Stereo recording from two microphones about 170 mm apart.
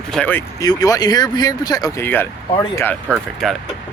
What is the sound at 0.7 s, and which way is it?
Speech, 20° left (ahead or behind).